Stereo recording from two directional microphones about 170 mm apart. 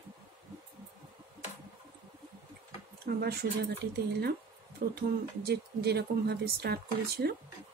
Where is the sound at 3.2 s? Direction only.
70° right (ahead or behind).